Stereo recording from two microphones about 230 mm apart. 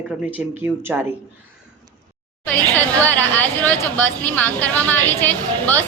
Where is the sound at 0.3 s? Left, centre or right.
Centre.